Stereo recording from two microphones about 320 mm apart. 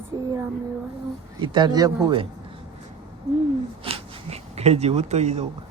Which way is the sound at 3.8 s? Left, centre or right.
Centre.